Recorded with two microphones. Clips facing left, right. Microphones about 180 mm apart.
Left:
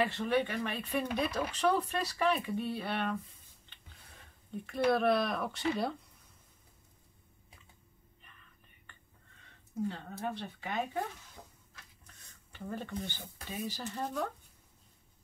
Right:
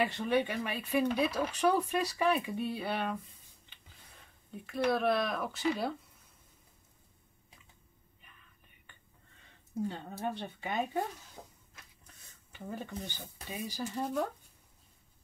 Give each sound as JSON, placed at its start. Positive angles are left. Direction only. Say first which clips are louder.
{"t": 0.0, "sound": "speech", "louder": "even", "side_deg": -15}
{"t": 4.5, "sound": "speech", "louder": "left 1 dB", "side_deg": 0}
{"t": 9.9, "sound": "speech", "louder": "right 1 dB", "side_deg": -20}
{"t": 12.5, "sound": "speech", "louder": "left 1 dB", "side_deg": -15}